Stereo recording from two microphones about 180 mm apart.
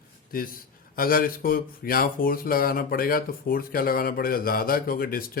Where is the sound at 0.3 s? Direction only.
55° left (ahead or behind).